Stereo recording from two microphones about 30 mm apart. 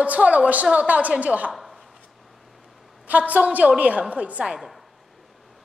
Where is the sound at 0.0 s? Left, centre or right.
Right.